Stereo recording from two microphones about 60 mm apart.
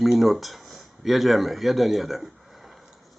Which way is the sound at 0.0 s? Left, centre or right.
Centre.